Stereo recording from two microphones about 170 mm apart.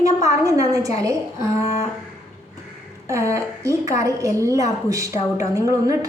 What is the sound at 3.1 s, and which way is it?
A woman's voice, 20° right (ahead or behind).